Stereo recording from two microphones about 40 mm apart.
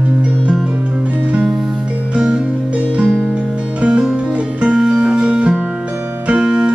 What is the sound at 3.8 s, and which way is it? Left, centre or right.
Music, right.